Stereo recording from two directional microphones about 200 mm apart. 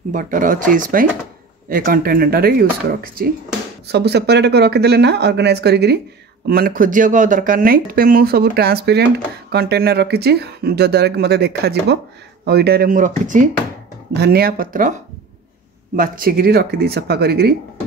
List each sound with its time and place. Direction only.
0.1 s speech: 40° right (ahead or behind)
3.8 s speech: 55° right (ahead or behind); by 13.5 s 40° right (ahead or behind)
14.1 s speech: 55° right (ahead or behind)
16.0 s speech: 45° right (ahead or behind)